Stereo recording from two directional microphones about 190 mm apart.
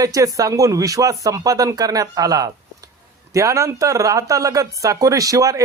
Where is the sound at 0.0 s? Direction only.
20° right (ahead or behind).